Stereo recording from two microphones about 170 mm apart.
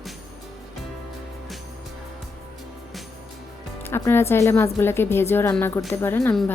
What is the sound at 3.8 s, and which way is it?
Speech, 15° left (ahead or behind).